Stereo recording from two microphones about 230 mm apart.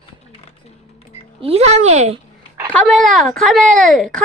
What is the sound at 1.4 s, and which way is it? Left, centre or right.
Speech, right.